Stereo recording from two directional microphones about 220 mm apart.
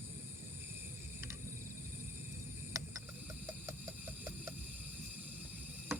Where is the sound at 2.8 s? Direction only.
15° right (ahead or behind).